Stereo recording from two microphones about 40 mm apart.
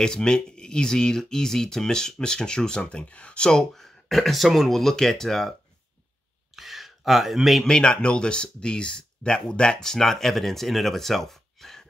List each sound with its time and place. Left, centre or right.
0.0 s speech: centre
6.5 s a sound: centre
7.6 s speech: centre